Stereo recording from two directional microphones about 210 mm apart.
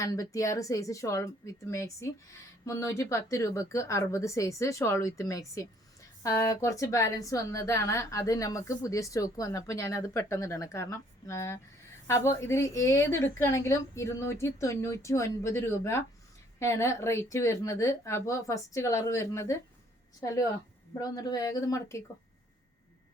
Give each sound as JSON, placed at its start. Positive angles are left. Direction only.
{"t": 0.0, "sound": "a woman's voice", "side_deg": 15}